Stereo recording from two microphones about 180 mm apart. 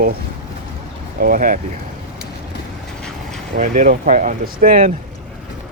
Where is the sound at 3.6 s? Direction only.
45° right (ahead or behind).